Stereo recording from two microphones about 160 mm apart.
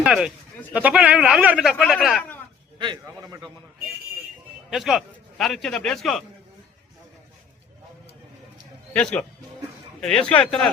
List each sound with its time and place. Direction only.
0.0 s a man's voice: 5° right (ahead or behind)
2.7 s a man's voice: 30° right (ahead or behind)
4.7 s a man's voice: centre (ahead or behind)
8.9 s a man's voice: 5° left (ahead or behind)